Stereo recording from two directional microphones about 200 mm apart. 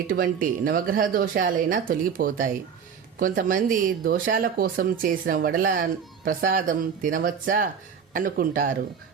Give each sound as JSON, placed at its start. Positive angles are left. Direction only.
{"t": 0.1, "sound": "speech", "side_deg": -45}